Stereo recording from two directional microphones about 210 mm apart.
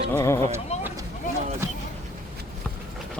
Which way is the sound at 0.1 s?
10° left (ahead or behind).